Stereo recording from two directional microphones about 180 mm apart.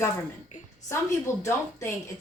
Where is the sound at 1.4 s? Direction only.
15° left (ahead or behind).